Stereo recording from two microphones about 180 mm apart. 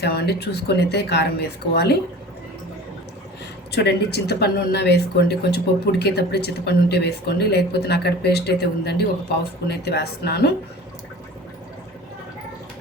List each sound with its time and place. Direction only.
0.0 s speech: 65° left (ahead or behind)
3.7 s speech: 65° left (ahead or behind)